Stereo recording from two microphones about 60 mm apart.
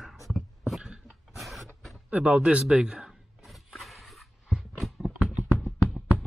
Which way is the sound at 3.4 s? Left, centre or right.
Centre.